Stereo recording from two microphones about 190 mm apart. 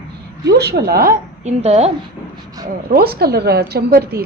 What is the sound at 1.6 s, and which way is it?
Speech, 35° right (ahead or behind).